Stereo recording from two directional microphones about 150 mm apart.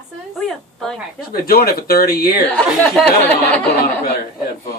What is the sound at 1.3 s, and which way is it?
Speech, 90° left.